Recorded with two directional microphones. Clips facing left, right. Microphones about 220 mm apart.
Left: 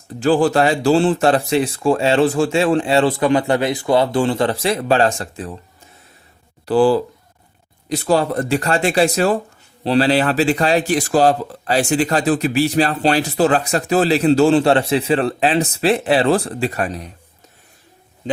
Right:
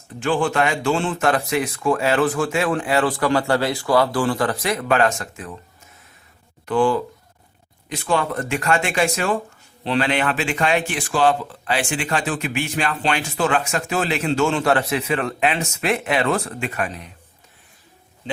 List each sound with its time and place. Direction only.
0.2 s speech: 35° left (ahead or behind)
6.7 s speech: 35° left (ahead or behind)